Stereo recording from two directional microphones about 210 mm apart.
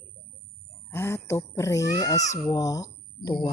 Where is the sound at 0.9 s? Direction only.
10° left (ahead or behind).